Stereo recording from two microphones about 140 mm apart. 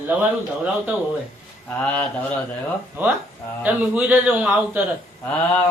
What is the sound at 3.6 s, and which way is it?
A man's voice, 10° right (ahead or behind).